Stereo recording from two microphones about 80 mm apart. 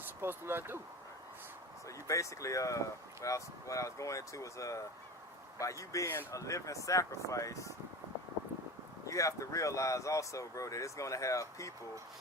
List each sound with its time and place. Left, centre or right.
0.2 s speech: right
2.0 s speech: left
9.0 s speech: left